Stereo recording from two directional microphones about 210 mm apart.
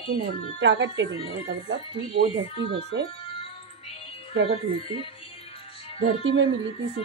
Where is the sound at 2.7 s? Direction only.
50° right (ahead or behind).